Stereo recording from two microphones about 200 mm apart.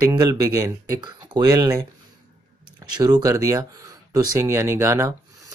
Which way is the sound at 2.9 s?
20° right (ahead or behind).